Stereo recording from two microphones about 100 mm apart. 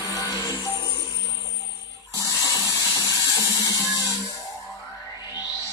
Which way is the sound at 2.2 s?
35° left (ahead or behind).